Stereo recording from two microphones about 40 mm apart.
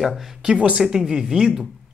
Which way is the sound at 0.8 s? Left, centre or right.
Centre.